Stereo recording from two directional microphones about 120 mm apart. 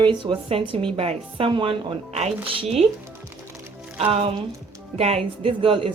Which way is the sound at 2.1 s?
60° right (ahead or behind).